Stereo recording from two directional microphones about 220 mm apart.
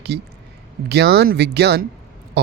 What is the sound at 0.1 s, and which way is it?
A man's voice, 50° right (ahead or behind).